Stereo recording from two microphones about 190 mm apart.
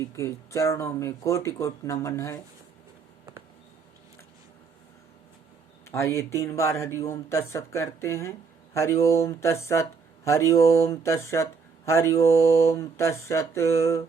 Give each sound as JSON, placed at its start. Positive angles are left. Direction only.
{"t": 0.0, "sound": "speech", "side_deg": 15}
{"t": 5.9, "sound": "speech", "side_deg": 15}